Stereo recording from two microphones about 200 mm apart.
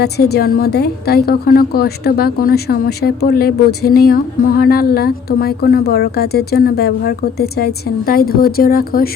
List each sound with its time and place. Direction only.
0.0 s speech: 55° left (ahead or behind)